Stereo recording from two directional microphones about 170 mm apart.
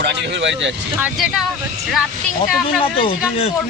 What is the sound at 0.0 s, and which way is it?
Speech, 90° right.